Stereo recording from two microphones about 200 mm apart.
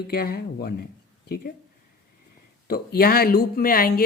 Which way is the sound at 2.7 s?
50° left (ahead or behind).